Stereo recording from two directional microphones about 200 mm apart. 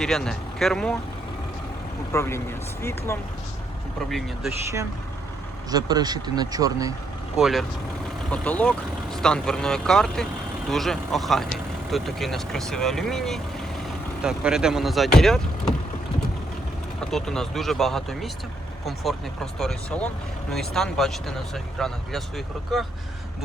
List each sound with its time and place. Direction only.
0.0 s speech: centre (ahead or behind)
2.1 s speech: 10° left (ahead or behind)
5.7 s speech: 20° right (ahead or behind)
7.3 s speech: centre (ahead or behind)
17.0 s speech: centre (ahead or behind)